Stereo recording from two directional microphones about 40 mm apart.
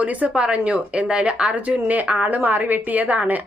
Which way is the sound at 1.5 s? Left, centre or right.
Right.